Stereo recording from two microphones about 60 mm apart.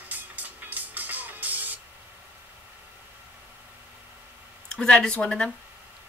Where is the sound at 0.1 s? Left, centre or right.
Right.